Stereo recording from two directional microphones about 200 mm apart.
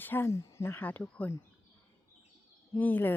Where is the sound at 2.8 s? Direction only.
10° left (ahead or behind).